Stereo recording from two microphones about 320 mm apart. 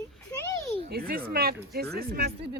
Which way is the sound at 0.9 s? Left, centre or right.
Right.